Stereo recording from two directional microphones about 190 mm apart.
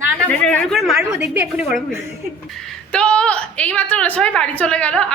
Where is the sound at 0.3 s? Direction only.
5° left (ahead or behind).